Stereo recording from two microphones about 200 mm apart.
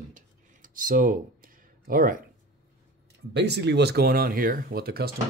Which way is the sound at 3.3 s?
55° right (ahead or behind).